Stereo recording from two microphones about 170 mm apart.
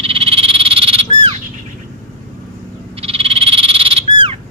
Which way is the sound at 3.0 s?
35° right (ahead or behind).